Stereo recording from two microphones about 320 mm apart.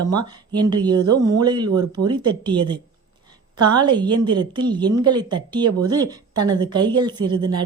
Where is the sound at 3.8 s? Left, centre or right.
Centre.